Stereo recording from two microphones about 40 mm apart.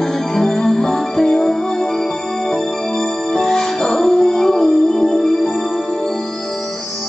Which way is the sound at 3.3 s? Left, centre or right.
Centre.